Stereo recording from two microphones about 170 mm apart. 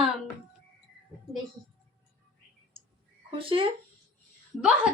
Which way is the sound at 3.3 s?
30° right (ahead or behind).